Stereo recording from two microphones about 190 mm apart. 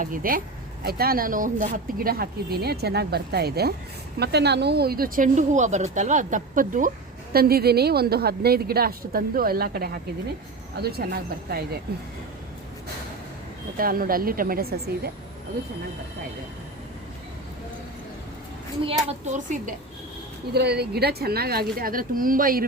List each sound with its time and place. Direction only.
0.0 s speech: 45° right (ahead or behind)
13.7 s speech: 50° right (ahead or behind)
18.8 s a child's voice: 30° right (ahead or behind)
20.5 s speech: 60° right (ahead or behind)